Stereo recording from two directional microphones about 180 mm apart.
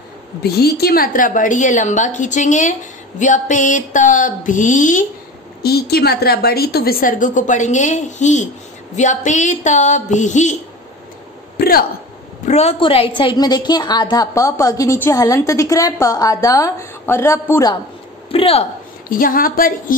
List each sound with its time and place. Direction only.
0.4 s a woman's voice: 60° left (ahead or behind); by 5.0 s 45° left (ahead or behind)
5.6 s a woman's voice: 60° left (ahead or behind); by 10.5 s 40° left (ahead or behind)
11.5 s a sound: 55° left (ahead or behind)
12.4 s a woman's voice: 35° left (ahead or behind); by 17.7 s 15° left (ahead or behind)
18.3 s a woman's voice: 35° left (ahead or behind)
19.0 s a woman's voice: 50° left (ahead or behind)